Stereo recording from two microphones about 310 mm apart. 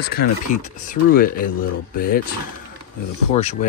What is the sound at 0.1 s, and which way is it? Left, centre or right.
Speech, left.